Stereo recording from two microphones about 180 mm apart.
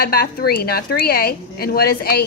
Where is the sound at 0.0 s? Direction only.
55° left (ahead or behind).